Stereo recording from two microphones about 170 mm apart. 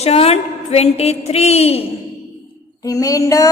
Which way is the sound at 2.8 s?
20° left (ahead or behind).